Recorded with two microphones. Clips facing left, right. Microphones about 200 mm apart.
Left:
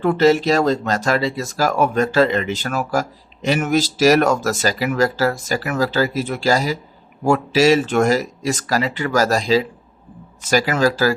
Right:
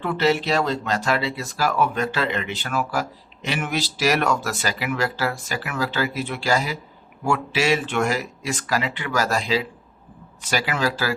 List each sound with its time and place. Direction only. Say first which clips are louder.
0.0 s speech: left 7 dB; 45° left (ahead or behind)